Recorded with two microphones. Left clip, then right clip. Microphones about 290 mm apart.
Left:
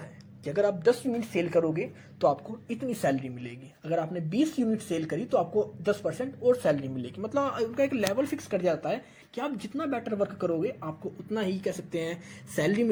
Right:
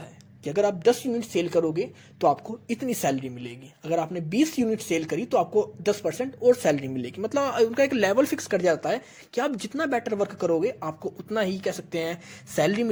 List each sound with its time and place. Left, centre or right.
0.6 s speech: right
3.2 s speech: right
4.1 s speech: right
4.5 s speech: right
6.7 s speech: right
7.3 s speech: right